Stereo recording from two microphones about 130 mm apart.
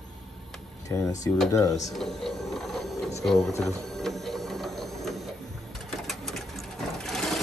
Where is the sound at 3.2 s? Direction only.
Centre (ahead or behind).